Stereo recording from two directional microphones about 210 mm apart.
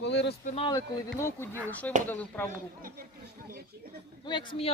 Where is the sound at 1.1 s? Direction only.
10° left (ahead or behind).